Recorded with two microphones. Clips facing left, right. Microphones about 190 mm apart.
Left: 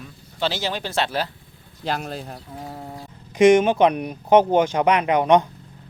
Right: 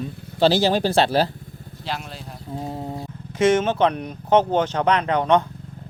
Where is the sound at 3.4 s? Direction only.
15° left (ahead or behind).